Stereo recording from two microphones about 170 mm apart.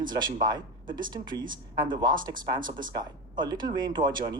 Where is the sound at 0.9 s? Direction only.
25° right (ahead or behind).